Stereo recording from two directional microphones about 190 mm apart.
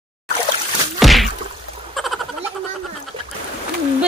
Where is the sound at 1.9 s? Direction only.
Centre (ahead or behind).